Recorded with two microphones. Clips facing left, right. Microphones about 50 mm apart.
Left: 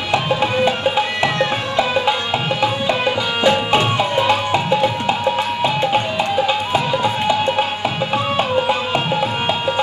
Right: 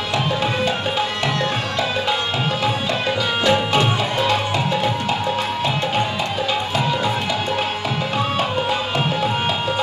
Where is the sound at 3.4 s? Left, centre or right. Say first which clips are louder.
Left 3 dB; centre.